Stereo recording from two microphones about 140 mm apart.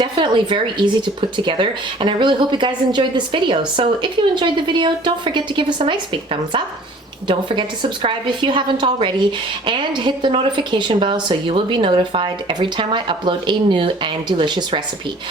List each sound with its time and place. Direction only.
0.0 s a woman's voice: 35° right (ahead or behind)
7.3 s a woman's voice: 35° right (ahead or behind)